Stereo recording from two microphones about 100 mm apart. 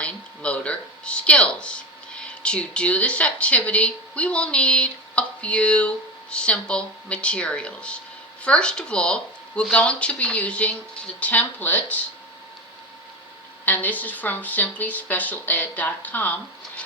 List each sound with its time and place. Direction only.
0.0 s speech: 10° left (ahead or behind)
13.7 s speech: 15° left (ahead or behind)